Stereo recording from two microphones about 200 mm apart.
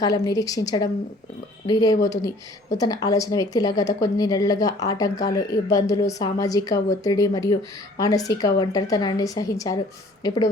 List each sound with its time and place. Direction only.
0.0 s a woman's voice: 20° left (ahead or behind)